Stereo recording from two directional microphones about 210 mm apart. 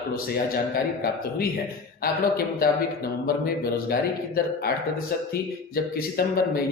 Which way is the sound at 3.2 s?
45° left (ahead or behind).